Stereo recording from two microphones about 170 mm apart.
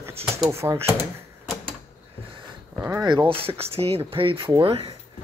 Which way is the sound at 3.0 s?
25° right (ahead or behind).